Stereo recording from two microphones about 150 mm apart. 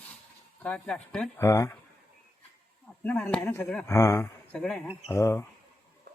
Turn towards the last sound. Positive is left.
turn(degrees=20)  # may be behind; listen again after turning